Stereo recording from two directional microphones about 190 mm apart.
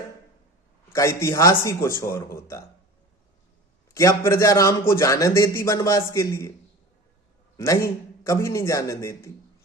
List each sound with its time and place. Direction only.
0.9 s a man's voice: 15° left (ahead or behind)
3.9 s a man's voice: 15° left (ahead or behind)
7.5 s a man's voice: 15° left (ahead or behind)